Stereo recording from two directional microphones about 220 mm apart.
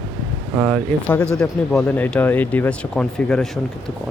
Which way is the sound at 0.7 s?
5° left (ahead or behind).